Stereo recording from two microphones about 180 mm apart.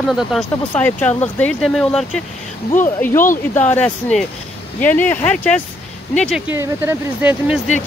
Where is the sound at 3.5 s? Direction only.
10° left (ahead or behind).